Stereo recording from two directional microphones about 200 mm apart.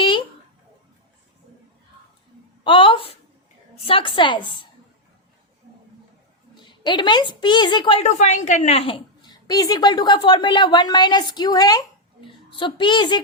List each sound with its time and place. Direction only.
2.6 s a sound: 25° left (ahead or behind)
3.8 s a woman's voice: 25° left (ahead or behind)
6.6 s a woman's voice: 25° left (ahead or behind)